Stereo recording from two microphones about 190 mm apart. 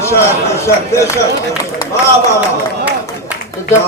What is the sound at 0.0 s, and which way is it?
A man's voice, 15° left (ahead or behind).